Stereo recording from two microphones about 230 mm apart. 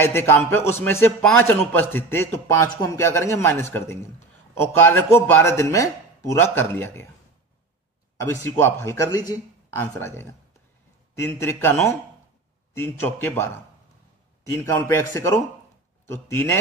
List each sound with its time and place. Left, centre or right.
0.0 s a man's voice: centre
8.2 s a man's voice: centre
14.5 s a man's voice: centre